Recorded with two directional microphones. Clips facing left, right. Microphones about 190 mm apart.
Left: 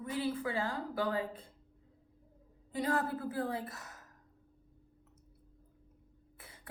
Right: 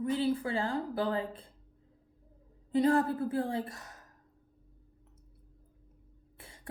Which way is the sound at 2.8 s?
30° right (ahead or behind).